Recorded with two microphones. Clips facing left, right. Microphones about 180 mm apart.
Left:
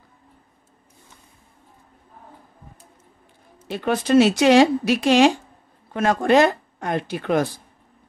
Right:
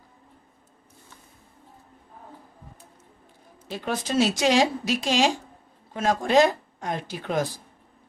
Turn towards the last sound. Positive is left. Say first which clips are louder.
# left 5 dB
turn(degrees=60)  # may be behind; listen again after turning